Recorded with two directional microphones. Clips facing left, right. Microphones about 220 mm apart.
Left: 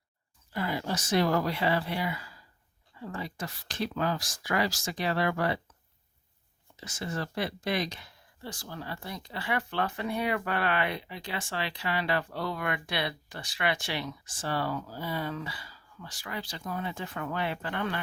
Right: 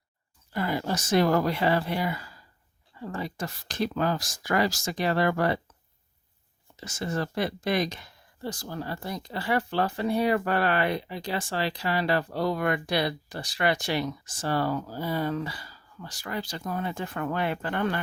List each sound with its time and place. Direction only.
0.5 s speech: 45° right (ahead or behind)
6.7 s speech: 45° right (ahead or behind)